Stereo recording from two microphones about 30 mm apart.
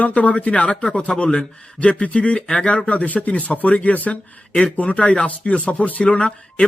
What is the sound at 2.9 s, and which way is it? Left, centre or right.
Speech, left.